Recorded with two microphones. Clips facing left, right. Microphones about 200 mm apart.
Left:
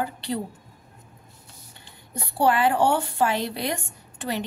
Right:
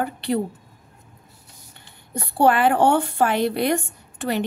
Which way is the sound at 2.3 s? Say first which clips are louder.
Right 3 dB; 55° right (ahead or behind).